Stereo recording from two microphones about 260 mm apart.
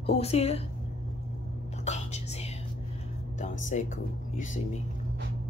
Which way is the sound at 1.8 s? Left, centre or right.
Left.